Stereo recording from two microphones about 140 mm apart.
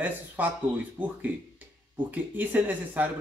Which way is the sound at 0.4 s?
10° right (ahead or behind).